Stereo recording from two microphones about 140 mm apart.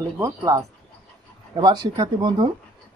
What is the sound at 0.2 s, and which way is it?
Speech, 25° right (ahead or behind).